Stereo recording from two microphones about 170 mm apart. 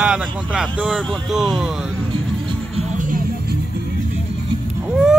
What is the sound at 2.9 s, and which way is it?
Music, 50° right (ahead or behind).